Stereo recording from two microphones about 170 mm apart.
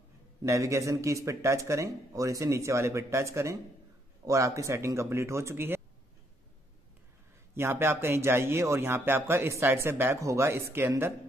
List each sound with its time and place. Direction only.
0.4 s speech: 20° right (ahead or behind)
7.5 s speech: 15° right (ahead or behind)